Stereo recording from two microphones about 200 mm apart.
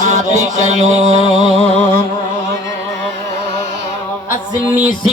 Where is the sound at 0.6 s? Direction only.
35° right (ahead or behind).